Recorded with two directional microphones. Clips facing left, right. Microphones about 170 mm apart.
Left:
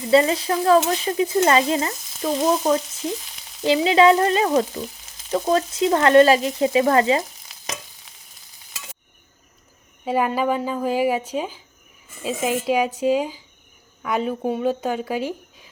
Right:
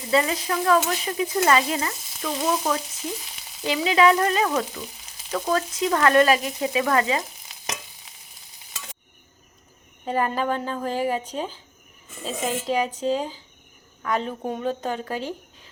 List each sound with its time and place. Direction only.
0.1 s stir: 30° left (ahead or behind)
3.7 s frying: 30° left (ahead or behind)
7.5 s stir: centre (ahead or behind)
10.1 s speech: 10° left (ahead or behind)